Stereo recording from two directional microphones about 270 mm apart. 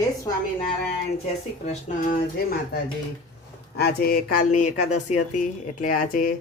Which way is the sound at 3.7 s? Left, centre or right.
Left.